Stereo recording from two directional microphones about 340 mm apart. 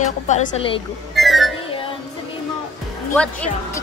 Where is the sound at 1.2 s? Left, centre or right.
Centre.